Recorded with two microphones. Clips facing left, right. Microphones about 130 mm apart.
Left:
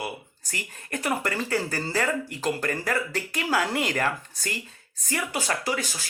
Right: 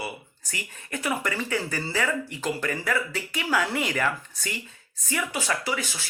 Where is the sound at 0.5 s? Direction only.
40° left (ahead or behind).